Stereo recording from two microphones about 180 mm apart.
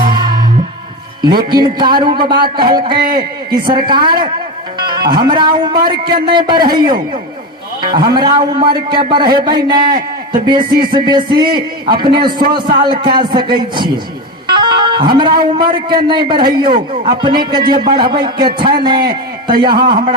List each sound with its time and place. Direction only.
0.0 s music: 25° right (ahead or behind)
1.5 s a man's voice: 25° right (ahead or behind)
14.4 s music: 25° right (ahead or behind)
15.9 s a man's voice: 25° right (ahead or behind)